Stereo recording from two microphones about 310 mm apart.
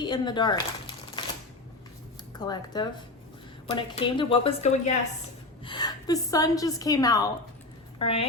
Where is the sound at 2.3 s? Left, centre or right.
Centre.